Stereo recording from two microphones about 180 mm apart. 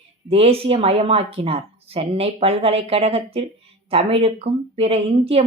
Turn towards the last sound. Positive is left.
turn(degrees=-35)  # may be behind; listen again after turning